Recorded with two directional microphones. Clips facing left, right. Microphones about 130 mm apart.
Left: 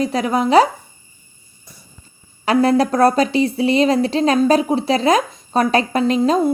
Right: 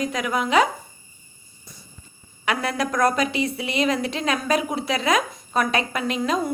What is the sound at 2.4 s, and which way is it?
A woman's voice, 35° left (ahead or behind).